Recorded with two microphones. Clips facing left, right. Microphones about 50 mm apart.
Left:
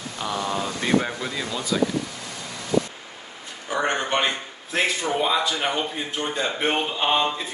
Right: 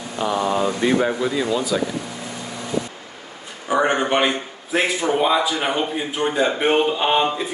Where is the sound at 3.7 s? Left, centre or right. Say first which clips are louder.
Right 5 dB; centre.